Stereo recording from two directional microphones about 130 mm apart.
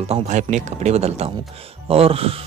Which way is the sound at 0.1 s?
70° right (ahead or behind).